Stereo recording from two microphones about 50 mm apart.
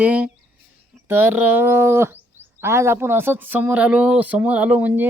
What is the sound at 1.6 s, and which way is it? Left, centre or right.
Speech, right.